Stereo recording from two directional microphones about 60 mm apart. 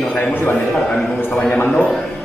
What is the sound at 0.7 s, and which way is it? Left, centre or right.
A man's voice, centre.